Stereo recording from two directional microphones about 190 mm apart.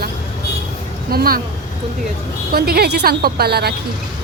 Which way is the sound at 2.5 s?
55° right (ahead or behind).